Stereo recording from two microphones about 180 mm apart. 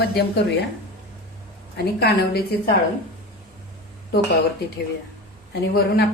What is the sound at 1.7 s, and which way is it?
Speech, 60° left (ahead or behind).